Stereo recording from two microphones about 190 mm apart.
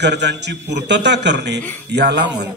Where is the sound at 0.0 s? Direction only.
65° right (ahead or behind).